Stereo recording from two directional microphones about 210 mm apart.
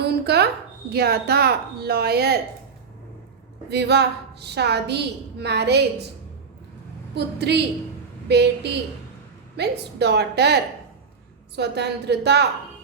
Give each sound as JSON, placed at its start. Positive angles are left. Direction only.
{"t": 0.0, "sound": "a woman's voice", "side_deg": -50}
{"t": 3.7, "sound": "a woman's voice", "side_deg": -50}
{"t": 7.1, "sound": "a woman's voice", "side_deg": -50}